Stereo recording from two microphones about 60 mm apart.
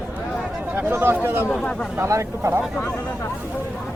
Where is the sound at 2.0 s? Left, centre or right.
Right.